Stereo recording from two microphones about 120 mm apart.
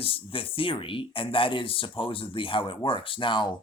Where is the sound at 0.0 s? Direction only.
50° left (ahead or behind).